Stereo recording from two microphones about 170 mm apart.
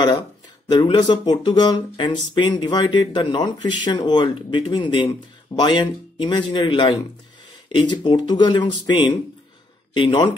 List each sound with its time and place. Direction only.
0.7 s speech: 25° left (ahead or behind)